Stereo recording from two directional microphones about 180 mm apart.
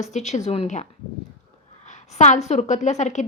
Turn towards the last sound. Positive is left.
turn(degrees=40)  # may be behind; listen again after turning